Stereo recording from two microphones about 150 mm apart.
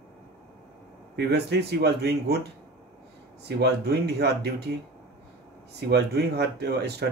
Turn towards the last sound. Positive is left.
turn(degrees=-90)